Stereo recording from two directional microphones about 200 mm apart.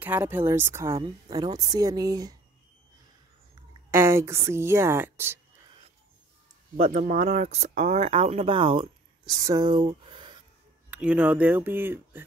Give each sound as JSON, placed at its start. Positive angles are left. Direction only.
{"t": 0.0, "sound": "speech", "side_deg": -10}
{"t": 3.9, "sound": "speech", "side_deg": -15}
{"t": 6.8, "sound": "speech", "side_deg": -40}
{"t": 10.9, "sound": "speech", "side_deg": -5}